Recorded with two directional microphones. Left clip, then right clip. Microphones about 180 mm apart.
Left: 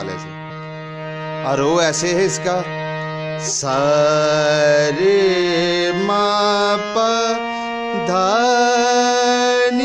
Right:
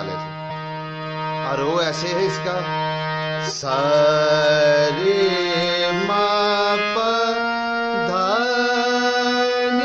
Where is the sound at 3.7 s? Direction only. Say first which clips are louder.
Left 1 dB; 60° left (ahead or behind).